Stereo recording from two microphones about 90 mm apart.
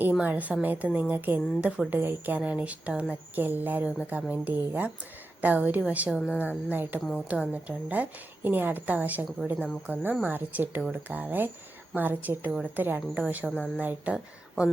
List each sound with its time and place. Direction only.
0.0 s a woman's voice: 15° right (ahead or behind)